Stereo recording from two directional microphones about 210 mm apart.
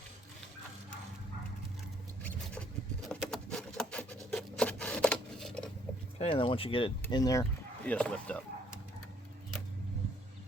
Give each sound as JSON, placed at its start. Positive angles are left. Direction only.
{"t": 3.1, "sound": "a sound", "side_deg": 5}
{"t": 6.1, "sound": "speech", "side_deg": 25}
{"t": 7.9, "sound": "speech", "side_deg": 5}